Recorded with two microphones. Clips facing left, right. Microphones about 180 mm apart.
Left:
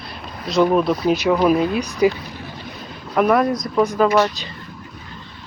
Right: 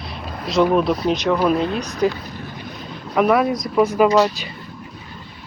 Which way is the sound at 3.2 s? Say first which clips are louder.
Even; 5° right (ahead or behind).